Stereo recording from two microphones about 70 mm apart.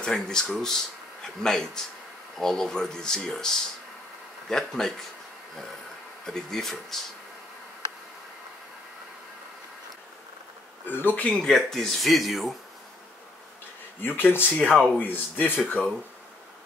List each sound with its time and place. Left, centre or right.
0.0 s speech: centre
6.2 s speech: centre
10.9 s speech: left
11.2 s speech: centre
14.0 s speech: left